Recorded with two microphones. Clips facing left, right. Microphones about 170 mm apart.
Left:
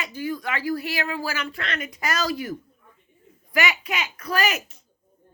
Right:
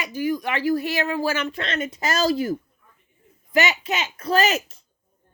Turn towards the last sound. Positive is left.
turn(degrees=-25)  # may be behind; listen again after turning